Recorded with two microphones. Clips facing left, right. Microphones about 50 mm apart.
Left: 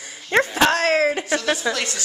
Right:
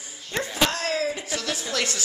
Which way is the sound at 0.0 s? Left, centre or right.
Left.